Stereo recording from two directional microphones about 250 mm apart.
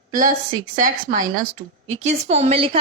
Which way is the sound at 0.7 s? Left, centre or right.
Right.